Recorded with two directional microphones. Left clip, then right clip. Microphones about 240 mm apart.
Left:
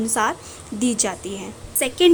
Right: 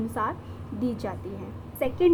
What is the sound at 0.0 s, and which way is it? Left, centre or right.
A woman's voice, left.